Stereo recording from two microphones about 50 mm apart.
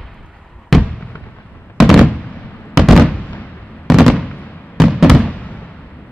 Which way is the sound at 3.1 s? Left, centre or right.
Left.